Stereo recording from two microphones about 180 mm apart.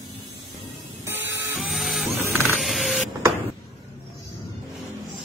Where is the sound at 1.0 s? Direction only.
15° right (ahead or behind).